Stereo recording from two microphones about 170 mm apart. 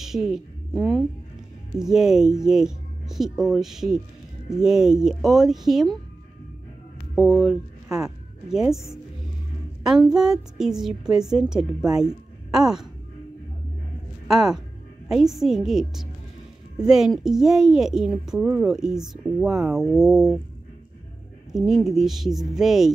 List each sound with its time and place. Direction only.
0.0 s a woman's voice: centre (ahead or behind)
7.2 s speech: 5° left (ahead or behind)
9.8 s a woman's voice: 5° right (ahead or behind)
14.2 s a woman's voice: 5° right (ahead or behind)
21.5 s a woman's voice: centre (ahead or behind)